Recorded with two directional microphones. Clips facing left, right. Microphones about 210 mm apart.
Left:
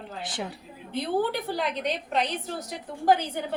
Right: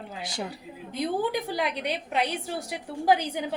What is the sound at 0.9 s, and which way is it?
A woman's voice, 15° right (ahead or behind).